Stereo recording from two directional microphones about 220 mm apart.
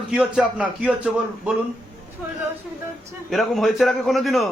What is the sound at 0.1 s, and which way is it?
Speech, 5° right (ahead or behind).